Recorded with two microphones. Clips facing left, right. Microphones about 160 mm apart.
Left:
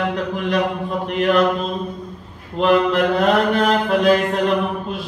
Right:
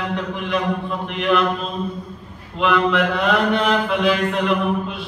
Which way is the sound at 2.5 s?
40° left (ahead or behind).